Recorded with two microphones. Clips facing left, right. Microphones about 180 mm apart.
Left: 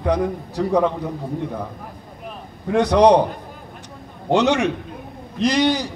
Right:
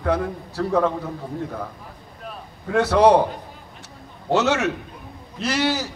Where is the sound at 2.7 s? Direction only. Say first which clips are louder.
Left 2 dB; 15° left (ahead or behind).